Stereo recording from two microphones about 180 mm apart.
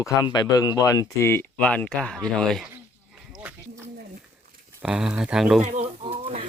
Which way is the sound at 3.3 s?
5° right (ahead or behind).